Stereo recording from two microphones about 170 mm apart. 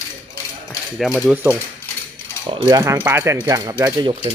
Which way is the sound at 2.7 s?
20° right (ahead or behind).